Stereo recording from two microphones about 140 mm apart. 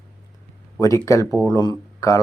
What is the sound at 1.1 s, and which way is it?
Speech, 20° left (ahead or behind).